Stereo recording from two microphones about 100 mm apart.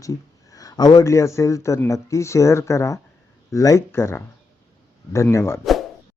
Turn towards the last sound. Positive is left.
turn(degrees=25)  # may be behind; listen again after turning